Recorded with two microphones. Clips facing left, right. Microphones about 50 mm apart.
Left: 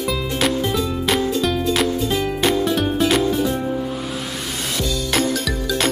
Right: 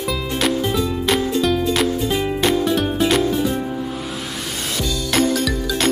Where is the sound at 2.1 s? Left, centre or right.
Centre.